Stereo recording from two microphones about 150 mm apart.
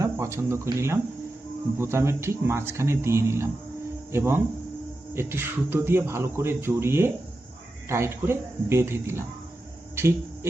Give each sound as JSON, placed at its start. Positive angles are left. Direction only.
{"t": 0.0, "sound": "speech", "side_deg": -20}